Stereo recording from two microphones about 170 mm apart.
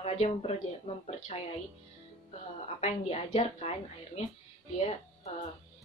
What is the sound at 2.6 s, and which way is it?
A woman's voice, 40° left (ahead or behind).